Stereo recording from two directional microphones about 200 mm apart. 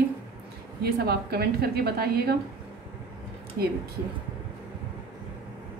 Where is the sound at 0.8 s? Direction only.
50° right (ahead or behind).